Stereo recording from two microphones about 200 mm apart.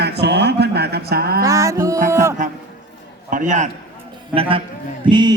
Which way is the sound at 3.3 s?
40° right (ahead or behind).